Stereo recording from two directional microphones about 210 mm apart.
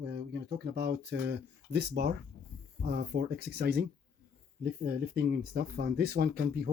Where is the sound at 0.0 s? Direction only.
55° right (ahead or behind).